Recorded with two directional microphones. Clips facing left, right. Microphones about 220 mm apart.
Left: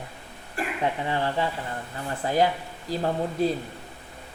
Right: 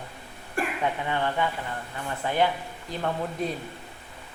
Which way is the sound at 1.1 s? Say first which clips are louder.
Left 1 dB; 30° left (ahead or behind).